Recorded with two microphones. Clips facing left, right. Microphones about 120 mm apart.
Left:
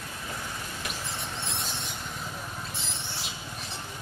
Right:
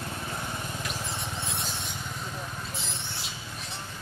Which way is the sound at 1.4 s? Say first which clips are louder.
Right 1 dB; centre (ahead or behind).